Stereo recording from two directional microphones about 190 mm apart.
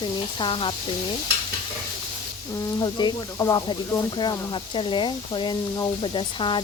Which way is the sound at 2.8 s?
25° left (ahead or behind).